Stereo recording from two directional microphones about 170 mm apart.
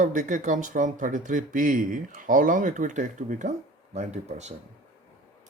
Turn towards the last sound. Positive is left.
turn(degrees=-40)  # may be behind; listen again after turning